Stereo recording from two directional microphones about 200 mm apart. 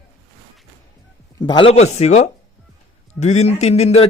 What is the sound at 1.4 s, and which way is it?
Speech, 25° left (ahead or behind).